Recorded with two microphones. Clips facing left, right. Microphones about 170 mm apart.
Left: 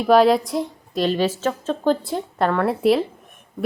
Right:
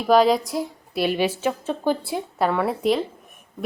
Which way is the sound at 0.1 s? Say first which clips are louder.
Left 2 dB; centre (ahead or behind).